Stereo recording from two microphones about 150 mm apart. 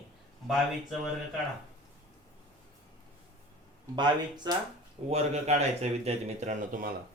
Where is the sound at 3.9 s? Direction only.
30° right (ahead or behind).